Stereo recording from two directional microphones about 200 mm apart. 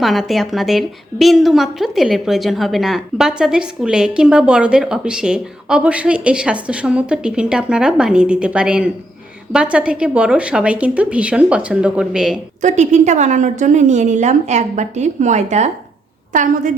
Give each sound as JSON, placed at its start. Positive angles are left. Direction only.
{"t": 0.0, "sound": "a woman's voice", "side_deg": 0}
{"t": 12.6, "sound": "a woman's voice", "side_deg": -35}